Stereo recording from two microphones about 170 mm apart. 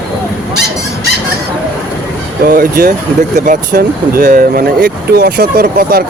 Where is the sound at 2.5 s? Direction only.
60° right (ahead or behind).